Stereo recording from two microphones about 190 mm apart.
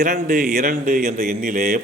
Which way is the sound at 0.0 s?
45° right (ahead or behind).